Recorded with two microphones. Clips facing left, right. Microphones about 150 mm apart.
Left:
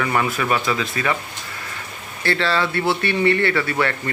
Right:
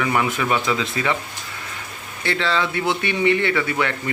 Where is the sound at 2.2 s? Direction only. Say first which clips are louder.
Left 1 dB; 15° right (ahead or behind).